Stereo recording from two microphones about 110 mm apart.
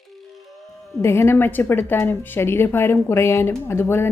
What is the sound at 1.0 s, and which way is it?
A woman's voice, 25° left (ahead or behind).